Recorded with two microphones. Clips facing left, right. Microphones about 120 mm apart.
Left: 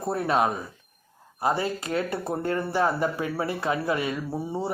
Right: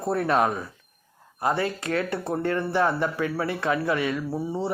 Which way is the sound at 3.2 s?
30° left (ahead or behind).